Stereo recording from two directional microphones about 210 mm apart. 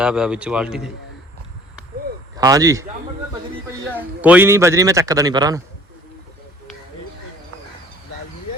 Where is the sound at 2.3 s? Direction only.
15° right (ahead or behind).